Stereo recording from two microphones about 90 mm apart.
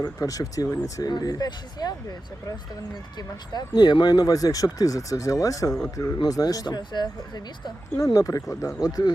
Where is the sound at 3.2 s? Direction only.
50° left (ahead or behind).